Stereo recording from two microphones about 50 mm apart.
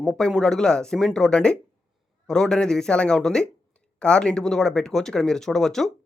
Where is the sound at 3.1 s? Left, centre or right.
Centre.